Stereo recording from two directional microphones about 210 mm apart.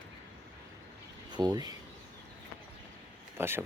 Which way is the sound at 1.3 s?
20° right (ahead or behind).